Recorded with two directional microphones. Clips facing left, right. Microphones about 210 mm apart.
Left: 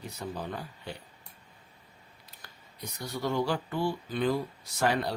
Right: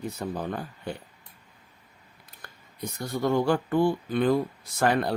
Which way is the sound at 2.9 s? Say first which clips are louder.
Right 5 dB; 50° right (ahead or behind).